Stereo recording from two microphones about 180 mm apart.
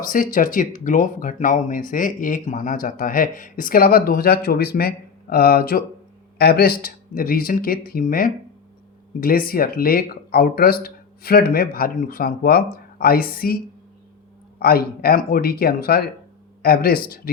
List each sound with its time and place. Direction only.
0.0 s speech: 50° left (ahead or behind)
14.6 s speech: 55° left (ahead or behind)